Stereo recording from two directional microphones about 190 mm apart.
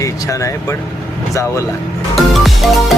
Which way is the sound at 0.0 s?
15° left (ahead or behind).